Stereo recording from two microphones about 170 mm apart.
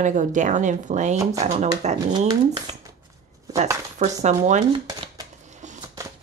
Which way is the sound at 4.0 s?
45° right (ahead or behind).